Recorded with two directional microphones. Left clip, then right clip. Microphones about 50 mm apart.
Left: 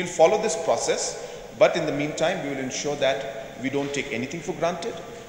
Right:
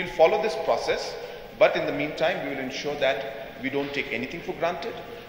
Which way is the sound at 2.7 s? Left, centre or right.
Left.